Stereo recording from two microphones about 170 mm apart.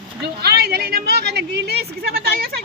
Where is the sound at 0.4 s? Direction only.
65° right (ahead or behind).